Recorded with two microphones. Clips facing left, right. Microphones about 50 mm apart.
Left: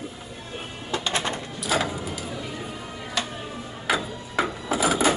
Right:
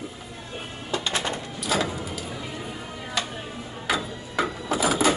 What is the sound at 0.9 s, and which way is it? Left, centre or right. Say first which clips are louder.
Bird: left 1 dB; left.